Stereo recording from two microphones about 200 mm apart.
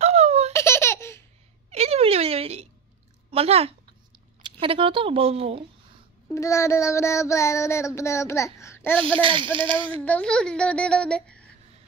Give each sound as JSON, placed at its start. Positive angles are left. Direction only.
{"t": 0.0, "sound": "baby laughter", "side_deg": -35}
{"t": 0.5, "sound": "laughter", "side_deg": 15}
{"t": 1.7, "sound": "a sound", "side_deg": -30}
{"t": 3.3, "sound": "speech", "side_deg": -30}
{"t": 6.2, "sound": "child singing", "side_deg": 15}
{"t": 9.0, "sound": "speech", "side_deg": -25}
{"t": 9.9, "sound": "speech", "side_deg": 10}